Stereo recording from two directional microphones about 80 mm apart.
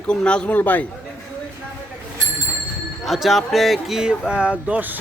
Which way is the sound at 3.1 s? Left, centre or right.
Centre.